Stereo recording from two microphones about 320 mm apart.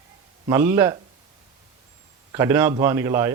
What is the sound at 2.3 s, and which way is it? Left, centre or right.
Speech, centre.